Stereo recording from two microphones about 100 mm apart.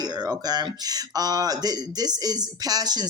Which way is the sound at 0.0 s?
40° right (ahead or behind).